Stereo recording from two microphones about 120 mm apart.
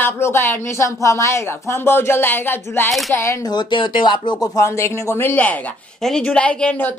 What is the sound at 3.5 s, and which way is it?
Speech, 40° left (ahead or behind).